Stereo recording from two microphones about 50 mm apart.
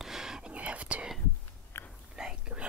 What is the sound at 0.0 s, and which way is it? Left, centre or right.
Whispering, centre.